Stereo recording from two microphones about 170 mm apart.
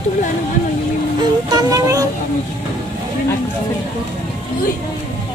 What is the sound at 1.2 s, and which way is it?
Music, 25° right (ahead or behind).